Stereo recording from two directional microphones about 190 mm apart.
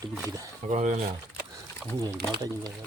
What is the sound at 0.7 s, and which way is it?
Speech, 40° right (ahead or behind).